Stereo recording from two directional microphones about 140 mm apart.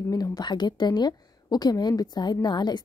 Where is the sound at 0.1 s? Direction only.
30° left (ahead or behind).